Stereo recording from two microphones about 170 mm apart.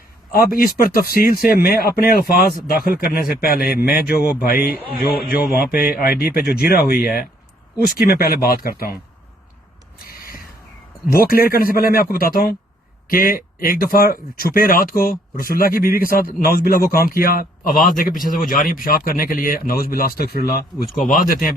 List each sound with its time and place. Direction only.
0.3 s speech: 60° left (ahead or behind)
11.1 s speech: 60° left (ahead or behind)